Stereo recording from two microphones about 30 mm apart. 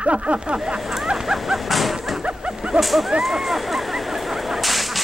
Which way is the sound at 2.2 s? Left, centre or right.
Right.